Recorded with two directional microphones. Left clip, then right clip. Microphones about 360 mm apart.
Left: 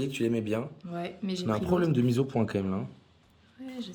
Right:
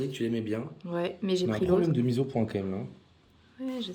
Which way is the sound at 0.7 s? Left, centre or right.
Centre.